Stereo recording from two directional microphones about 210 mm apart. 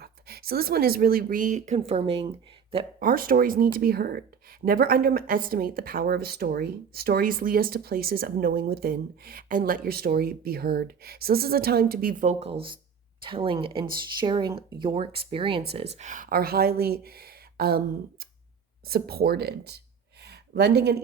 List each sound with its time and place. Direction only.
0.0 s speech: 45° right (ahead or behind); by 2.3 s 30° right (ahead or behind)
3.0 s a woman's voice: 45° right (ahead or behind); by 15.6 s 25° right (ahead or behind)
16.0 s a woman's voice: 35° right (ahead or behind)
20.2 s a sound: 50° right (ahead or behind)